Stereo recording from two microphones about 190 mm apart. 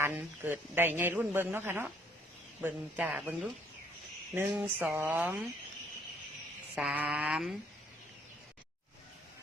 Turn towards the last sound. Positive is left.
turn(degrees=-5)  # may be behind; listen again after turning